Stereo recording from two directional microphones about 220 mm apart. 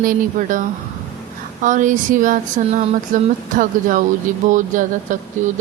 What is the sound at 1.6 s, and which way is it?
A woman's voice, 35° right (ahead or behind).